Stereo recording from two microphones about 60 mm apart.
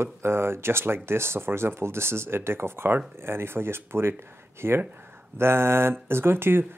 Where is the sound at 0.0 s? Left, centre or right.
Right.